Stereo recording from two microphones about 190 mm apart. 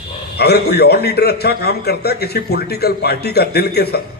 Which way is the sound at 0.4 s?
55° left (ahead or behind).